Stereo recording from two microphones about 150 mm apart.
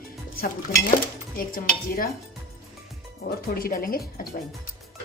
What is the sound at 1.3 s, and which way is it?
Speech, 70° left (ahead or behind).